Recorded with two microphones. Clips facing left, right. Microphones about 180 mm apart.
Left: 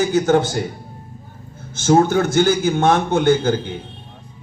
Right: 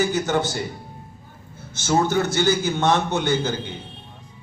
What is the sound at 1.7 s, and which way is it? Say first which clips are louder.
A man's voice: left 6 dB; 50° left (ahead or behind).